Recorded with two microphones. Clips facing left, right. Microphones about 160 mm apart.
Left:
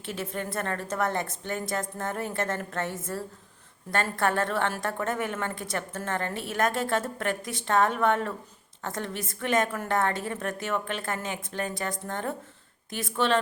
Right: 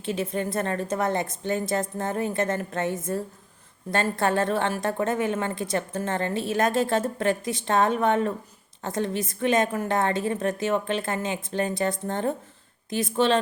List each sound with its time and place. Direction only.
0.0 s a woman's voice: 20° right (ahead or behind)